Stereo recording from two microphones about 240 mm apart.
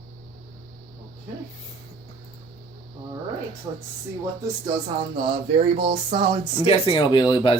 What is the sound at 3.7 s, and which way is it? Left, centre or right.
Speech, centre.